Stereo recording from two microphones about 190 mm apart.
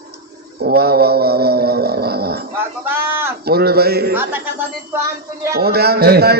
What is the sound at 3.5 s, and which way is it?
Speech, 55° right (ahead or behind).